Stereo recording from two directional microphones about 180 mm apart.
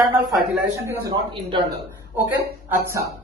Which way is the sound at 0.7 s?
25° right (ahead or behind).